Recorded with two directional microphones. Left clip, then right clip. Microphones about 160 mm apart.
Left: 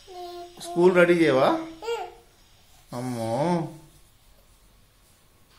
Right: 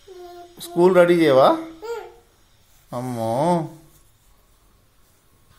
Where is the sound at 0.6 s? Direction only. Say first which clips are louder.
Right 4 dB; 25° right (ahead or behind).